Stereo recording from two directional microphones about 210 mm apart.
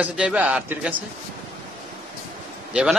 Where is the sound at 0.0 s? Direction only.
5° right (ahead or behind).